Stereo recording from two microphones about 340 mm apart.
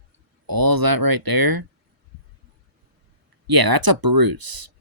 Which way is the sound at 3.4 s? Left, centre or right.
Right.